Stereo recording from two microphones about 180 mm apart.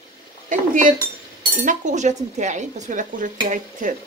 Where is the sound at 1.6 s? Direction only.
45° right (ahead or behind).